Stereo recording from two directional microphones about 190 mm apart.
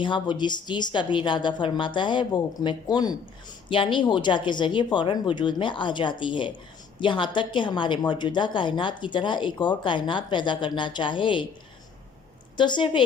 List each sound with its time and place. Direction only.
0.0 s a woman's voice: 25° left (ahead or behind)
12.5 s a woman's voice: 25° left (ahead or behind)